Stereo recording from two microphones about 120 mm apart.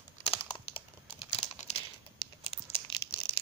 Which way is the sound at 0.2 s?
50° left (ahead or behind).